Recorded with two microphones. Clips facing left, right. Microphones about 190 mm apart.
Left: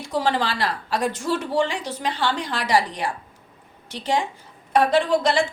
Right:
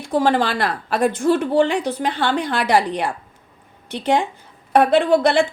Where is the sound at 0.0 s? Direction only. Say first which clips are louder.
Right 5 dB; 55° right (ahead or behind).